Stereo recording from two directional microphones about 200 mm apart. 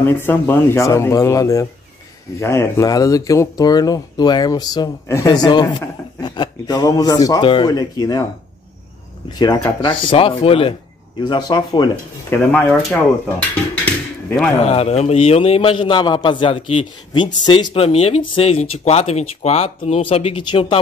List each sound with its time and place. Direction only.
0.0 s speech: 10° left (ahead or behind)
9.4 s speech: 20° left (ahead or behind)
12.4 s speech: 10° left (ahead or behind)
14.6 s speech: 30° left (ahead or behind)